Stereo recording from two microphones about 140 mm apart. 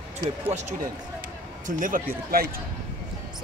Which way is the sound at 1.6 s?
70° right (ahead or behind).